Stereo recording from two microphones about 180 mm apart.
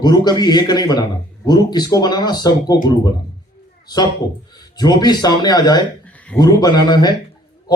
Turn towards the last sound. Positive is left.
turn(degrees=25)  # may be behind; listen again after turning